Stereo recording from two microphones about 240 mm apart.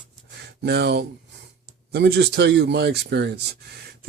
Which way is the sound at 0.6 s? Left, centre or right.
Right.